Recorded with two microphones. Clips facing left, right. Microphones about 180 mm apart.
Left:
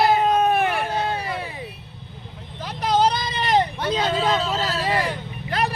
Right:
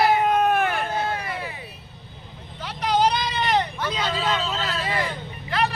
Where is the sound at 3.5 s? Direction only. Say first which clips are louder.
Left 7 dB; 30° left (ahead or behind).